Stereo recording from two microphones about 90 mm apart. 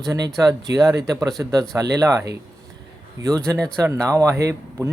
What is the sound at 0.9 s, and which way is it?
Speech, 45° right (ahead or behind).